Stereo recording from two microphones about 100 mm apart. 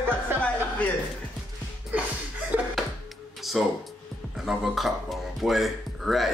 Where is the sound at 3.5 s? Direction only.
Centre (ahead or behind).